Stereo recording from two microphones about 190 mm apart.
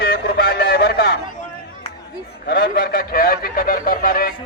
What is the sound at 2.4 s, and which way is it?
A man's voice, 55° left (ahead or behind).